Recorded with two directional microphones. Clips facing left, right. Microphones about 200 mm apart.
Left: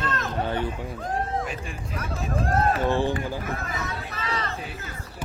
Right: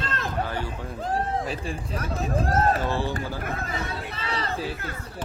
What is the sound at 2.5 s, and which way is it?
Speech, 40° right (ahead or behind).